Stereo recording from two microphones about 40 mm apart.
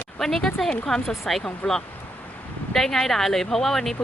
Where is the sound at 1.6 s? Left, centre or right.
Left.